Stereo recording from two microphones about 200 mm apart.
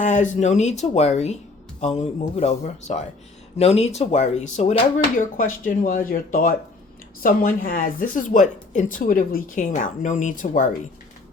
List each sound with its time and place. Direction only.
0.0 s a woman's voice: 40° left (ahead or behind)